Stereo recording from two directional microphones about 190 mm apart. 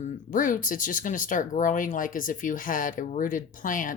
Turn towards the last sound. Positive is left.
turn(degrees=45)  # may be behind; listen again after turning